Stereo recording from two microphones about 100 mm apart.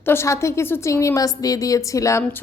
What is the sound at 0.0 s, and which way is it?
A woman's voice, 25° left (ahead or behind).